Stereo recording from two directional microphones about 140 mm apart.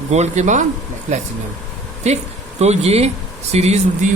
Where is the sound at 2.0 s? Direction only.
50° right (ahead or behind).